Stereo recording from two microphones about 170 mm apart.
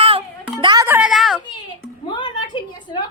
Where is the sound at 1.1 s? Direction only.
Centre (ahead or behind).